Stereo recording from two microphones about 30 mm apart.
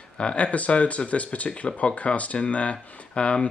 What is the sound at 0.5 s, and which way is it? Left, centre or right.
Speech, left.